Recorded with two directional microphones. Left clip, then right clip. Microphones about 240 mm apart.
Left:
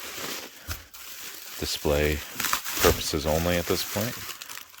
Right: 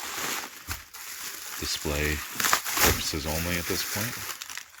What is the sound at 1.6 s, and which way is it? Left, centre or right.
Speech, centre.